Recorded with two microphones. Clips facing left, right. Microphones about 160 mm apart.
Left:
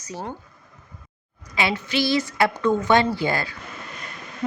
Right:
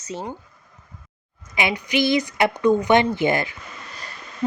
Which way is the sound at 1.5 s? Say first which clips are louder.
Right 1 dB; 15° right (ahead or behind).